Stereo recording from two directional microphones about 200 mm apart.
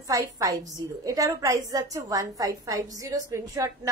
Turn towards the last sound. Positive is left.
turn(degrees=-15)  # may be behind; listen again after turning